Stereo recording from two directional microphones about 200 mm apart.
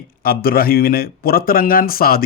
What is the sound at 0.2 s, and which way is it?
A man's voice, 50° left (ahead or behind).